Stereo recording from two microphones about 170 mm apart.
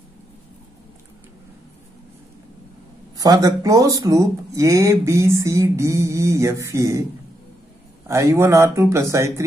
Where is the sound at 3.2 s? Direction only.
20° right (ahead or behind).